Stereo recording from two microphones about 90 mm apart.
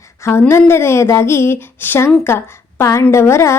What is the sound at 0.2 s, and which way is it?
Speech, 30° left (ahead or behind).